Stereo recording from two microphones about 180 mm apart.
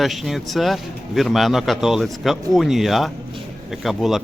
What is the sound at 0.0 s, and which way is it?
Speech, centre (ahead or behind).